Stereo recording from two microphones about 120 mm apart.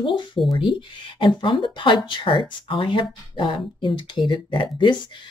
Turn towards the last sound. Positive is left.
turn(degrees=45)  # may be behind; listen again after turning